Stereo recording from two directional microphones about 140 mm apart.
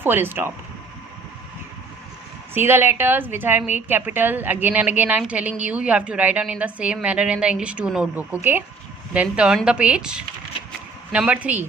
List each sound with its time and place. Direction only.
0.0 s a woman's voice: 15° right (ahead or behind)
2.5 s a woman's voice: 15° right (ahead or behind)